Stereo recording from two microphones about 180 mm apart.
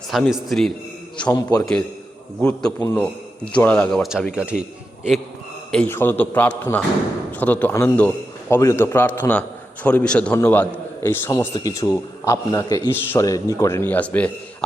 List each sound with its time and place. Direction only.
0.1 s speech: centre (ahead or behind)
1.3 s a man's voice: 20° left (ahead or behind)
2.4 s a man's voice: 5° left (ahead or behind)
5.7 s a man's voice: 10° left (ahead or behind)